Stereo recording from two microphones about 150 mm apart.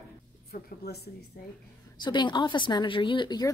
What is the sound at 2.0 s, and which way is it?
A woman's voice, 30° left (ahead or behind).